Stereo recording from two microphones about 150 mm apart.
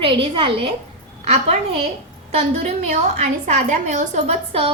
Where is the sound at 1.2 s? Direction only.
45° right (ahead or behind).